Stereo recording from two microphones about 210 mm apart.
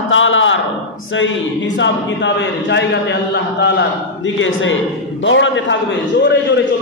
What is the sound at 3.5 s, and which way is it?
A man's voice, 55° left (ahead or behind).